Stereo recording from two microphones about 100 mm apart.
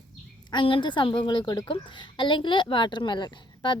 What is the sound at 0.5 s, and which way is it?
A woman's voice, 60° left (ahead or behind).